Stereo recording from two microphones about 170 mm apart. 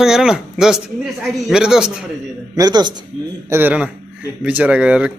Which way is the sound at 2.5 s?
25° right (ahead or behind).